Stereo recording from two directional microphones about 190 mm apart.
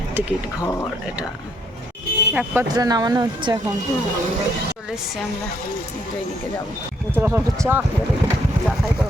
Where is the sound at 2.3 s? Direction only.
5° right (ahead or behind).